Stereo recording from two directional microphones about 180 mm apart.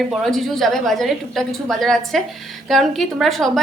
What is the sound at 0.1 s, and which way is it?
A woman's voice, centre (ahead or behind).